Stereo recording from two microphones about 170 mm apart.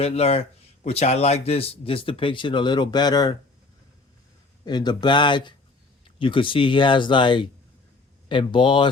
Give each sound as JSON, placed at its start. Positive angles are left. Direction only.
{"t": 0.0, "sound": "speech", "side_deg": 35}
{"t": 4.6, "sound": "speech", "side_deg": 25}